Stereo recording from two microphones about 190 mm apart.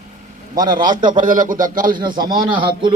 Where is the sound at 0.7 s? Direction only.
45° right (ahead or behind).